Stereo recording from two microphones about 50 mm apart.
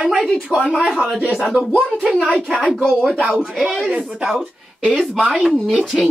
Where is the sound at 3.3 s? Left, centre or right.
Centre.